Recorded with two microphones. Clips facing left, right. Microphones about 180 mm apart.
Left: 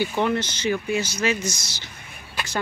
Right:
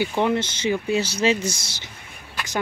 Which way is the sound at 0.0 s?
20° right (ahead or behind).